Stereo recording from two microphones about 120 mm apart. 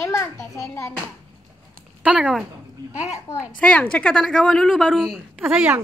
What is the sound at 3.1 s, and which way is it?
Speech, 25° left (ahead or behind).